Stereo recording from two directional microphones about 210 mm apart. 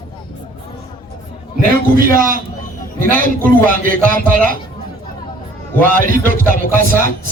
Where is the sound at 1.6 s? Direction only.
40° right (ahead or behind).